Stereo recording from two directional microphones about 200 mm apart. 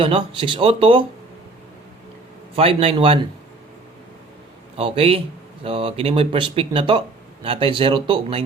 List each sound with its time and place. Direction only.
0.0 s speech: 25° right (ahead or behind)
2.6 s speech: 30° right (ahead or behind)
4.8 s speech: 30° right (ahead or behind)